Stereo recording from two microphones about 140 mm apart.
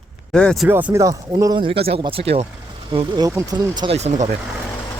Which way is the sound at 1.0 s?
25° right (ahead or behind).